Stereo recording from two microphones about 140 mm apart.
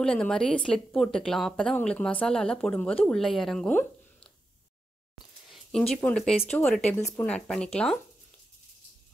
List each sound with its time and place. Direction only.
0.0 s speech: 5° left (ahead or behind)
5.5 s a sound: 5° left (ahead or behind)
5.9 s speech: 10° left (ahead or behind)
7.0 s speech: 20° left (ahead or behind)
7.2 s speech: 5° left (ahead or behind)